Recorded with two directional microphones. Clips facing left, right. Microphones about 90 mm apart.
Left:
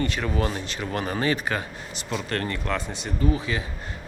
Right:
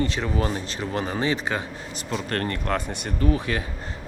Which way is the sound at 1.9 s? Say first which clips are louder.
Right 1 dB; 40° right (ahead or behind).